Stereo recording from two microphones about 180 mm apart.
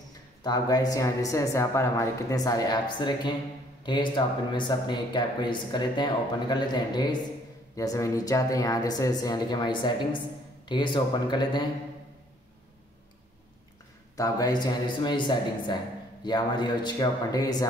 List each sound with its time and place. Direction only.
0.4 s speech: 20° left (ahead or behind)
14.1 s speech: 20° left (ahead or behind)